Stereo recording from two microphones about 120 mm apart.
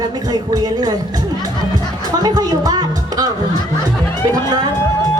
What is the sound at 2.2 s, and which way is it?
Speech, 35° right (ahead or behind).